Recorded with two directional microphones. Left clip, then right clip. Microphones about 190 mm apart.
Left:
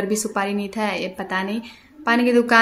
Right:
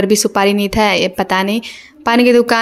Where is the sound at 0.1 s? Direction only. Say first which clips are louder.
Right 10 dB; 45° right (ahead or behind).